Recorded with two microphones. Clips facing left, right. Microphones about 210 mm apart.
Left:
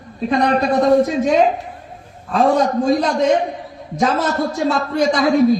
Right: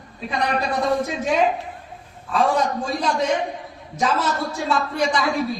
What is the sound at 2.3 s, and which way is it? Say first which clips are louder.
Speech: left 5 dB; 40° left (ahead or behind).